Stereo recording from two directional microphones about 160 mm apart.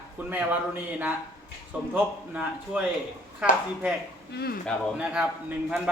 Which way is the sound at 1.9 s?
10° right (ahead or behind).